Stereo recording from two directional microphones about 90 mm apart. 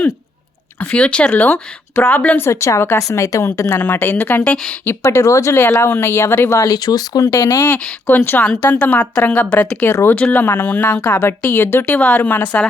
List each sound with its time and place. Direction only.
0.8 s speech: 15° left (ahead or behind)
2.5 s speech: 30° left (ahead or behind)
4.5 s speech: 10° left (ahead or behind)
4.9 s speech: 30° left (ahead or behind)
6.6 s speech: 45° left (ahead or behind)
7.3 s speech: 30° left (ahead or behind)
7.7 s speech: 20° left (ahead or behind)
9.8 s speech: 25° left (ahead or behind)
11.9 s speech: 15° left (ahead or behind)